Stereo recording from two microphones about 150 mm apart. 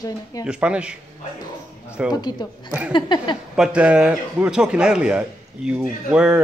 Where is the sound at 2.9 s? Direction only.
30° left (ahead or behind).